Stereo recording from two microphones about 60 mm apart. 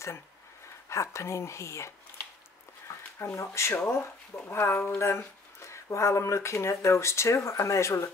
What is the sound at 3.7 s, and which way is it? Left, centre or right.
Speech, left.